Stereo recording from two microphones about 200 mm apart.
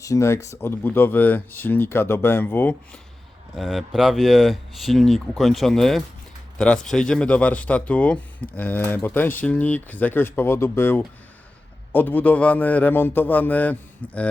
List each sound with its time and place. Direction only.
0.0 s speech: 15° left (ahead or behind)